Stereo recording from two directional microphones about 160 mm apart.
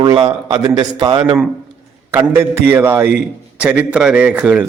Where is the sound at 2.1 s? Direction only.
15° right (ahead or behind).